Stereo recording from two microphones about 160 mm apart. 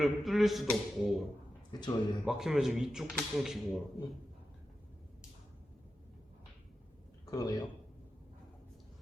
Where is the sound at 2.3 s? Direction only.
Centre (ahead or behind).